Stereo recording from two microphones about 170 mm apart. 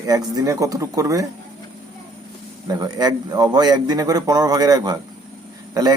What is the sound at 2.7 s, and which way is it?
A man's voice, 25° right (ahead or behind).